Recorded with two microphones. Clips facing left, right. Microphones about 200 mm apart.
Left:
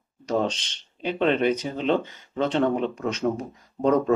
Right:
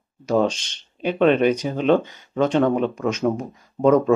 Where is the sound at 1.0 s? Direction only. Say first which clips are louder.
Right 5 dB; 15° right (ahead or behind).